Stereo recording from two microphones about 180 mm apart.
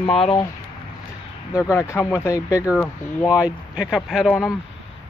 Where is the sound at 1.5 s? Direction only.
15° left (ahead or behind).